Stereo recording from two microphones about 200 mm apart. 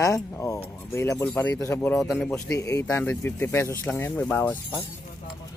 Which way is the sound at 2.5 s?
15° left (ahead or behind).